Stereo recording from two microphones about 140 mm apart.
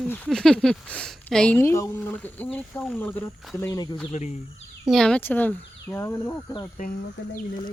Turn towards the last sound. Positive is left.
turn(degrees=85)